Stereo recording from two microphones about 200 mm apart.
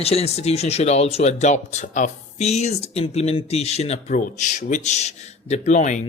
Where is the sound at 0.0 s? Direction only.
30° left (ahead or behind).